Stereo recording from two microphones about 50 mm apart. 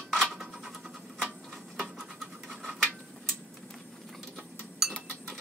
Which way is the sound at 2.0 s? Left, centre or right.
Centre.